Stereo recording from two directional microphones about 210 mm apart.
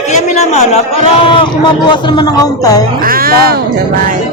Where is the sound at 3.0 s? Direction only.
45° right (ahead or behind).